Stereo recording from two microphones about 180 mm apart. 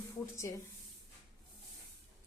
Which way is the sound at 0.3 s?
15° left (ahead or behind).